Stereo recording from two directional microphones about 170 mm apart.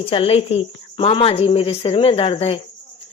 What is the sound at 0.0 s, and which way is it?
Speech, 35° left (ahead or behind).